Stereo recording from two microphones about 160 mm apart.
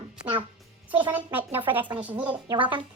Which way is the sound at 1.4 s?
35° right (ahead or behind).